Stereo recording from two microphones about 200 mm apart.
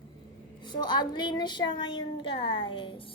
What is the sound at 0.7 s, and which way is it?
A woman's voice, 20° left (ahead or behind).